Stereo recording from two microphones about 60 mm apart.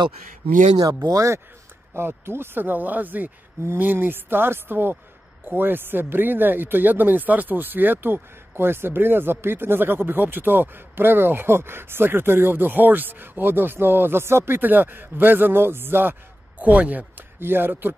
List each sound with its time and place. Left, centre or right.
1.1 s speech: right
2.0 s speech: right
16.5 s speech: right
17.4 s speech: right